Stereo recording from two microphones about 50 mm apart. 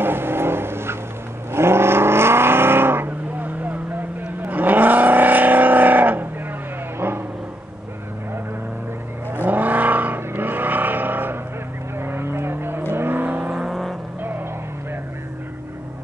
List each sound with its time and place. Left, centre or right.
0.0 s vehicle: right
4.4 s vehicle: right
7.0 s a sound: right
9.3 s vehicle: right
13.5 s vehicle: centre